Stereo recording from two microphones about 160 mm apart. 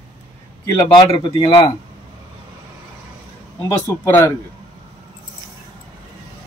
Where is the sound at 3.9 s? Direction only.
15° left (ahead or behind).